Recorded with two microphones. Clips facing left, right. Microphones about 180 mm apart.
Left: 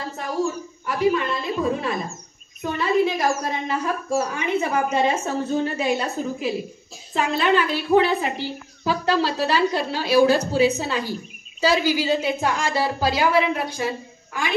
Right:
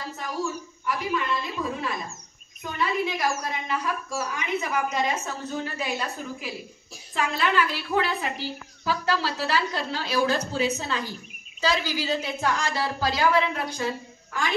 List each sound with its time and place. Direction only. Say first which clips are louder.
0.4 s a woman's voice: left 7 dB; 30° left (ahead or behind); by 13.8 s 10° left (ahead or behind)